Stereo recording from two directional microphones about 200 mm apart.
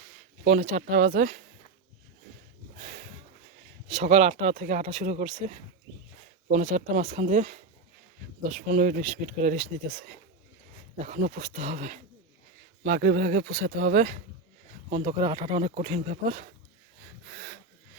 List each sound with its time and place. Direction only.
0.4 s speech: 40° right (ahead or behind)
2.7 s snort: 40° right (ahead or behind)
3.8 s speech: 35° right (ahead or behind)
14.8 s speech: 25° right (ahead or behind)